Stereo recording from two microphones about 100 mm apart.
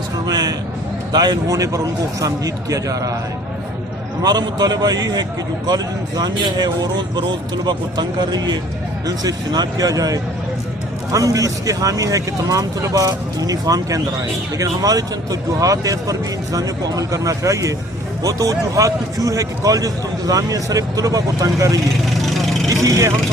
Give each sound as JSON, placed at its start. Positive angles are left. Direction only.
{"t": 0.3, "sound": "a sound", "side_deg": -40}
{"t": 1.1, "sound": "speech", "side_deg": -40}
{"t": 4.2, "sound": "speech", "side_deg": -40}
{"t": 22.1, "sound": "vehicle", "side_deg": 0}
{"t": 22.7, "sound": "speech", "side_deg": -35}